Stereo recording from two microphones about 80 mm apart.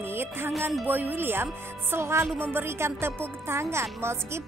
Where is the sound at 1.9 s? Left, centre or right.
Right.